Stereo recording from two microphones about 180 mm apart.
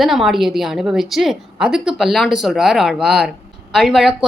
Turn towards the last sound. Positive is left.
turn(degrees=0)  # may be behind; listen again after turning